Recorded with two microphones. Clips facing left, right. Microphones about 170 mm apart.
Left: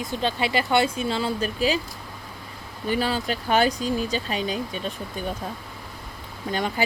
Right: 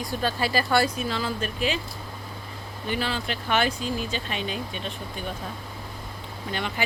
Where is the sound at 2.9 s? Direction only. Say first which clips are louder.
Left 4 dB; 40° left (ahead or behind).